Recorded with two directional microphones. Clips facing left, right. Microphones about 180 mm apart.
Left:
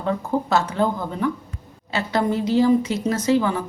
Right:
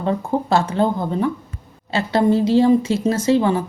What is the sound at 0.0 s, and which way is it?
Speech, 30° right (ahead or behind).